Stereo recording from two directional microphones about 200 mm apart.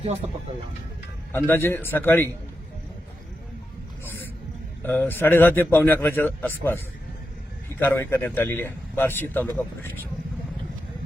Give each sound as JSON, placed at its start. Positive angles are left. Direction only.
{"t": 0.0, "sound": "speech", "side_deg": -35}
{"t": 1.3, "sound": "speech", "side_deg": 10}
{"t": 4.0, "sound": "a sound", "side_deg": 10}
{"t": 4.8, "sound": "speech", "side_deg": 10}
{"t": 7.8, "sound": "speech", "side_deg": 10}